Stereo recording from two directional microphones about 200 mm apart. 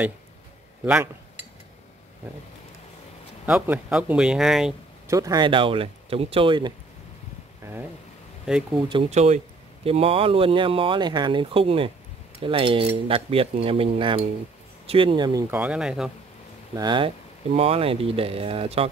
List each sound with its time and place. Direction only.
0.8 s speech: 10° right (ahead or behind)
3.4 s speech: 5° right (ahead or behind)
5.0 s speech: 15° right (ahead or behind)
8.8 s speech: 30° right (ahead or behind)
15.5 s speech: 5° right (ahead or behind)
16.7 s speech: 20° right (ahead or behind)